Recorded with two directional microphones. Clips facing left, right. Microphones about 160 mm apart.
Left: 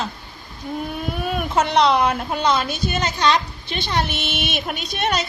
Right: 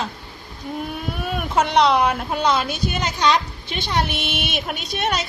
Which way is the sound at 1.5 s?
5° right (ahead or behind).